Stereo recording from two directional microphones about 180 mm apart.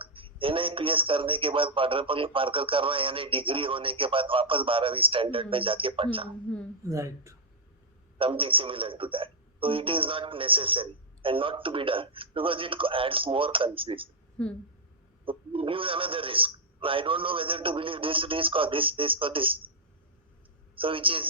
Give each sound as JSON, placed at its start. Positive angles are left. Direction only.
{"t": 0.0, "sound": "a man's voice", "side_deg": -30}
{"t": 6.5, "sound": "speech", "side_deg": 5}
{"t": 6.8, "sound": "speech", "side_deg": -15}
{"t": 8.2, "sound": "a man's voice", "side_deg": -30}
{"t": 14.4, "sound": "speech", "side_deg": 5}
{"t": 15.2, "sound": "a man's voice", "side_deg": -30}
{"t": 20.7, "sound": "a man's voice", "side_deg": -30}